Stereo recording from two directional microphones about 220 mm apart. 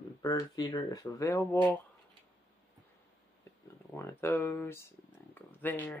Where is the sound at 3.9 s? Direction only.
10° left (ahead or behind).